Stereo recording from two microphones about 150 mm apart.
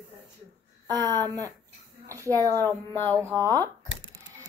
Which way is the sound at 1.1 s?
15° left (ahead or behind).